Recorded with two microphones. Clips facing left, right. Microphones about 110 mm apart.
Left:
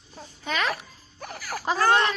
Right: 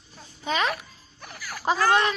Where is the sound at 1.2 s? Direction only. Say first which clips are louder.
Left 5 dB; 45° left (ahead or behind).